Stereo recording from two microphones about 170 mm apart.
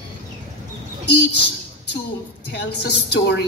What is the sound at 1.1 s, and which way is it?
Speech, 80° left.